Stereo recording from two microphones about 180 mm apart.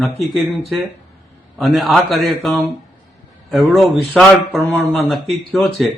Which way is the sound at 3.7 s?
Centre (ahead or behind).